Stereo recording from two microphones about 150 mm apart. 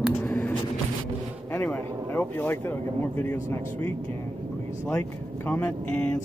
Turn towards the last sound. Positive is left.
turn(degrees=10)  # may be behind; listen again after turning